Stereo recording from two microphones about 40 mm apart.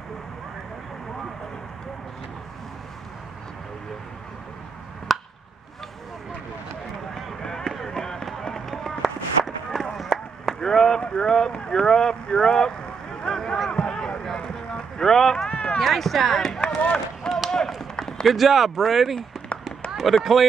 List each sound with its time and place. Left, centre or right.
5.1 s chop: centre
7.6 s fireworks: centre
7.9 s fireworks: centre
8.5 s run: centre
10.6 s speech: centre
13.2 s a sound: centre
13.7 s run: left
15.5 s run: left
15.8 s speech: centre
16.6 s run: left
17.5 s run: centre
18.3 s speech: centre
20.1 s speech: left